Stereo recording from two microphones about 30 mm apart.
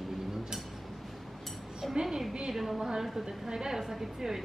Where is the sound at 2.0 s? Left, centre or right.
Centre.